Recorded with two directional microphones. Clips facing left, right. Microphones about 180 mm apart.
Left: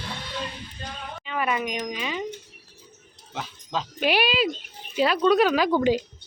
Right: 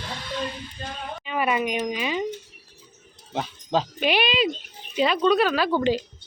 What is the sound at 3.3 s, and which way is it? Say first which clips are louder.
Speech: right 6 dB; 35° right (ahead or behind).